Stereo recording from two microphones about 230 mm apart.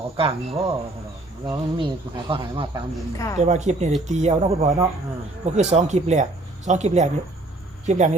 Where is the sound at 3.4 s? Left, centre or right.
Right.